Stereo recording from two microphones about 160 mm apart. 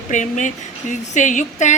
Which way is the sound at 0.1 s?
50° left (ahead or behind).